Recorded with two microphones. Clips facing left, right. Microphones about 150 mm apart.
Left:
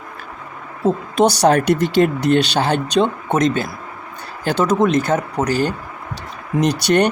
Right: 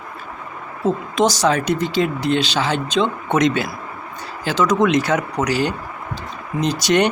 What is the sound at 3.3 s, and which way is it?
Speech, 45° left (ahead or behind).